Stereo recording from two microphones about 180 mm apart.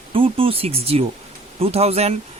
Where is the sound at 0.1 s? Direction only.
30° right (ahead or behind).